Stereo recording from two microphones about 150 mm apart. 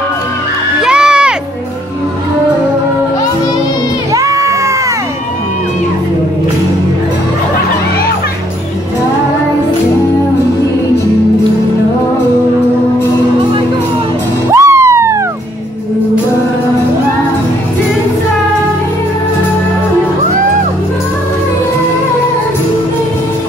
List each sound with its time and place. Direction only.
0.8 s music: 5° right (ahead or behind)
4.1 s children shouting: 20° right (ahead or behind)
14.5 s music: 20° right (ahead or behind)